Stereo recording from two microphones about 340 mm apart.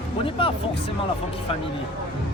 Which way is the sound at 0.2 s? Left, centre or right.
Centre.